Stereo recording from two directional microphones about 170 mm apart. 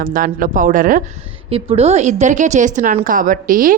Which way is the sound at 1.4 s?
35° right (ahead or behind).